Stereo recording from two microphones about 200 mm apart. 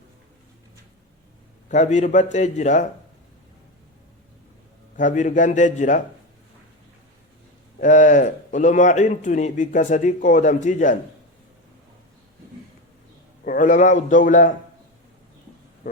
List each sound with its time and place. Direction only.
1.7 s a man's voice: 35° left (ahead or behind)
4.9 s a man's voice: 40° left (ahead or behind)
7.8 s a man's voice: 40° left (ahead or behind)
13.4 s a man's voice: 45° left (ahead or behind)